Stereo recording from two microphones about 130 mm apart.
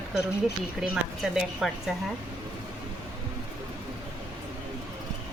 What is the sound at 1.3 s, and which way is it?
Speech, 5° right (ahead or behind).